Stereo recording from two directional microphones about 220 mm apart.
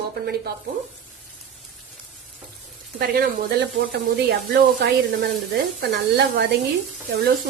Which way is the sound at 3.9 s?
50° right (ahead or behind).